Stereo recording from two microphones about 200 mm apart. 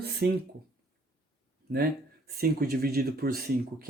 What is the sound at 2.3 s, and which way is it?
Speech, 50° right (ahead or behind).